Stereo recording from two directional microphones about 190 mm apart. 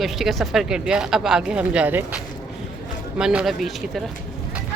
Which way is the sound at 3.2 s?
5° right (ahead or behind).